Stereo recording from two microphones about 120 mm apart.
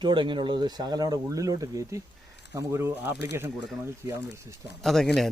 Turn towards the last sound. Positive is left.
turn(degrees=0)  # may be behind; listen again after turning